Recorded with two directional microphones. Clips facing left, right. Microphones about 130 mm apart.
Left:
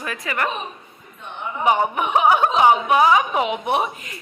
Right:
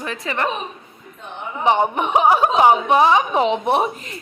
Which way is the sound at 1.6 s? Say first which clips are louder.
Right 2 dB; 30° right (ahead or behind).